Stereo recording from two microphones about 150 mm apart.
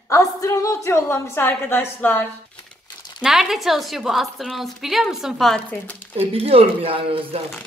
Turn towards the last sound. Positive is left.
turn(degrees=-35)  # may be behind; listen again after turning